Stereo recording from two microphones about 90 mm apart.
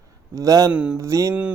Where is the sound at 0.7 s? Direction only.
10° right (ahead or behind).